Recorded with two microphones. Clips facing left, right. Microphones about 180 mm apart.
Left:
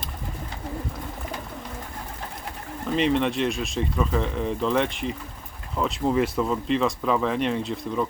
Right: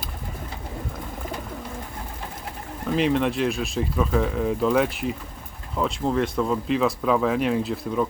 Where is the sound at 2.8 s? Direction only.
Centre (ahead or behind).